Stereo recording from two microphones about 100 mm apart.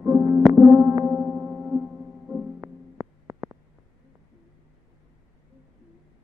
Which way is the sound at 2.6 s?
30° right (ahead or behind).